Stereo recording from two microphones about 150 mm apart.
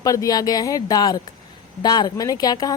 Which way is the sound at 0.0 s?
25° left (ahead or behind).